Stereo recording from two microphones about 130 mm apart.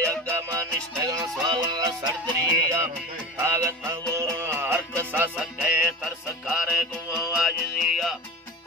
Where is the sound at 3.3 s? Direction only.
20° right (ahead or behind).